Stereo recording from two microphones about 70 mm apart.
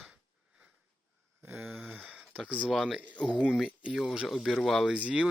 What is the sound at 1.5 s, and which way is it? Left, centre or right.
Speech, centre.